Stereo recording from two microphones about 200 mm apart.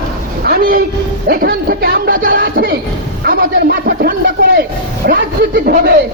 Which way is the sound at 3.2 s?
45° right (ahead or behind).